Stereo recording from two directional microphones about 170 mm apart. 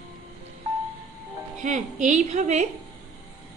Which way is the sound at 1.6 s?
45° right (ahead or behind).